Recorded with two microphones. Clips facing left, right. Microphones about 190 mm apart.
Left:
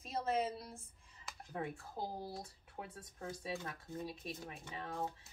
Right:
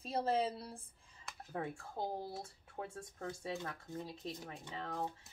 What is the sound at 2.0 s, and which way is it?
Speech, 25° right (ahead or behind).